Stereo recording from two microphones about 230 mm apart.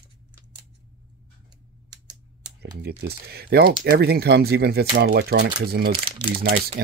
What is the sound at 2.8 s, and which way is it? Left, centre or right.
Speech, right.